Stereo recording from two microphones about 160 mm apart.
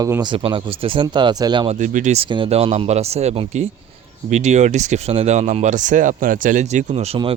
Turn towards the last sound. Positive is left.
turn(degrees=-40)  # may be behind; listen again after turning